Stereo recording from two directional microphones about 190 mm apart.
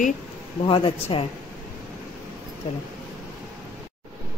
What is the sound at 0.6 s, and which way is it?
Speech, 25° left (ahead or behind).